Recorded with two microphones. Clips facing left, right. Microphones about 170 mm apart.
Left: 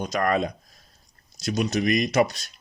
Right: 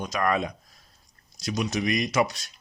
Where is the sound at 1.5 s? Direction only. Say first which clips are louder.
Left 3 dB; 50° left (ahead or behind).